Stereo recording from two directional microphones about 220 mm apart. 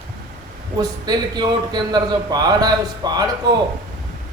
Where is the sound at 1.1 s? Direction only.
20° right (ahead or behind).